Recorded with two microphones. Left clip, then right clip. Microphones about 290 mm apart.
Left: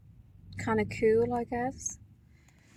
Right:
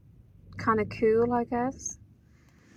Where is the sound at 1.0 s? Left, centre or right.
Right.